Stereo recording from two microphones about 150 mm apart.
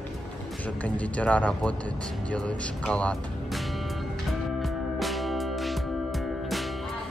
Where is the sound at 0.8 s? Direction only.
10° left (ahead or behind).